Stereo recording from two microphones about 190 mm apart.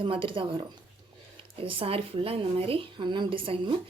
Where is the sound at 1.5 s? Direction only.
30° right (ahead or behind).